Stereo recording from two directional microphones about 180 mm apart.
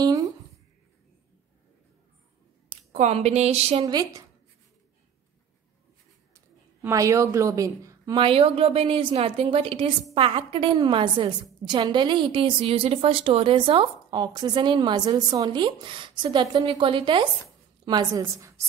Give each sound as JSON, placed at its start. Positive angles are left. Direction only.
{"t": 0.0, "sound": "a sound", "side_deg": -20}
{"t": 2.9, "sound": "a woman's voice", "side_deg": -40}
{"t": 3.8, "sound": "a woman's voice", "side_deg": -20}
{"t": 6.8, "sound": "a woman's voice", "side_deg": -15}
{"t": 8.2, "sound": "a woman's voice", "side_deg": -30}